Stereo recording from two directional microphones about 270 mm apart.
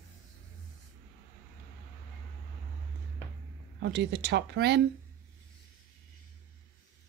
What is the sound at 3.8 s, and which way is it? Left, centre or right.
Speech, right.